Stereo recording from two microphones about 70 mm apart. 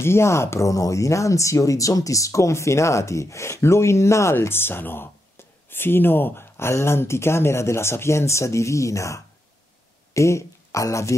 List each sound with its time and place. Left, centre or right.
0.0 s speech: left